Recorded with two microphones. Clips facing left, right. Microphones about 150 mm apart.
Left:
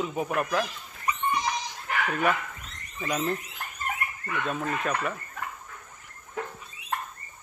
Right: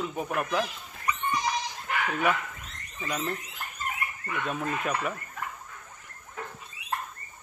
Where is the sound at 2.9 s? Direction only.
10° left (ahead or behind).